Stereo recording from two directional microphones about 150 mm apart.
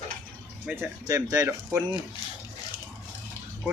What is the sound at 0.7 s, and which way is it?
Speech, 5° right (ahead or behind).